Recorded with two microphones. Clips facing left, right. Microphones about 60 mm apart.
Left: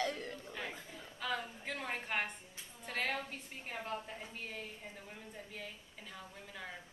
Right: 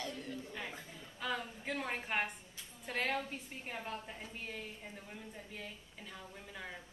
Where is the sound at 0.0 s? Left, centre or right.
Left.